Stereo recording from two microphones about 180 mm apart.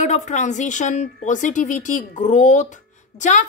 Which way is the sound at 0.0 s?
40° left (ahead or behind).